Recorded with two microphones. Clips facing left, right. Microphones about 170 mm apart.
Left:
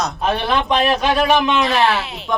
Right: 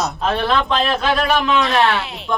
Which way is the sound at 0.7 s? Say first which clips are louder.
Left 2 dB; 15° left (ahead or behind).